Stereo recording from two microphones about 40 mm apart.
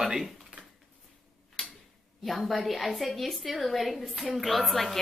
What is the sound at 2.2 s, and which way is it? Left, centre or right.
A woman's voice, centre.